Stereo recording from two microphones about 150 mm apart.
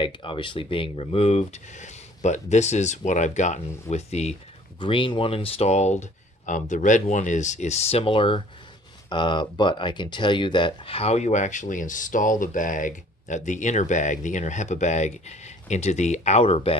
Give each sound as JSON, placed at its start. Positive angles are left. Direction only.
{"t": 0.0, "sound": "speech", "side_deg": 35}
{"t": 4.7, "sound": "speech", "side_deg": 35}